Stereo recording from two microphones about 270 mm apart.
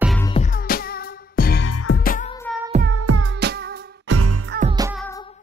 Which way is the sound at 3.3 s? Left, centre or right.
Right.